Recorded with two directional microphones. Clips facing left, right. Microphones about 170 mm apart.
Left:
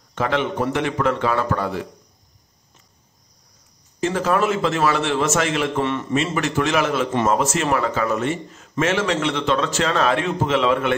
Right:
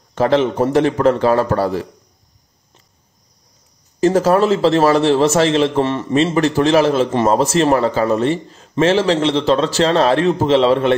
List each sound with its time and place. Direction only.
0.1 s a man's voice: 35° right (ahead or behind)
4.0 s a man's voice: 40° right (ahead or behind)